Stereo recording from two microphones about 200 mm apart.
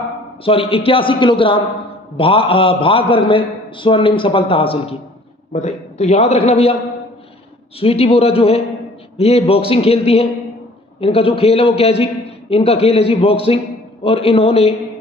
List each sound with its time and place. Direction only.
0.4 s a man's voice: 30° left (ahead or behind)
7.8 s a man's voice: 30° left (ahead or behind)